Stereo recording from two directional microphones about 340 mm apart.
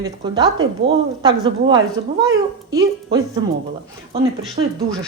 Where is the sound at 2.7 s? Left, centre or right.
Centre.